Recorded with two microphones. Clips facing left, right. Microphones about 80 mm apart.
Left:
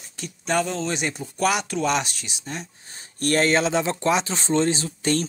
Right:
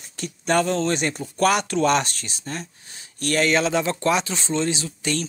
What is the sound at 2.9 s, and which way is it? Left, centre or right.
Speech, left.